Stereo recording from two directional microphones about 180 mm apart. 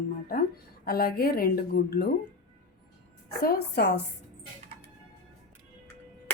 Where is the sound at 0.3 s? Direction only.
55° left (ahead or behind).